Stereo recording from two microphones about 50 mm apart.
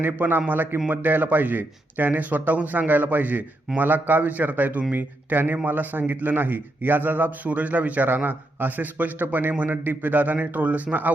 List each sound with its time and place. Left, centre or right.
0.0 s a man's voice: right